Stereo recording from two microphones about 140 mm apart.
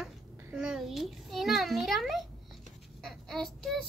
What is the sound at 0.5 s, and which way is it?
A child's voice, 5° right (ahead or behind).